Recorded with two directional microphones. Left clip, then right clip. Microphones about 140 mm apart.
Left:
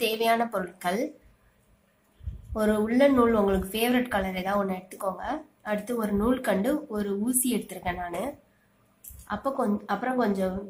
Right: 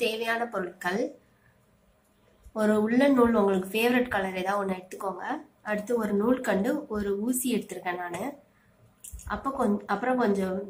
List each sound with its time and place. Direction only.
0.1 s a woman's voice: 50° left (ahead or behind)
2.5 s a woman's voice: 40° left (ahead or behind)
9.3 s a woman's voice: 40° left (ahead or behind)